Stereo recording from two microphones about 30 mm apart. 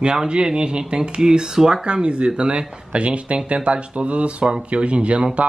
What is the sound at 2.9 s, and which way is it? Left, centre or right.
Speech, right.